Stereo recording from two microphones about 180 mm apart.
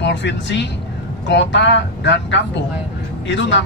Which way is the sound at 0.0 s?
80° left.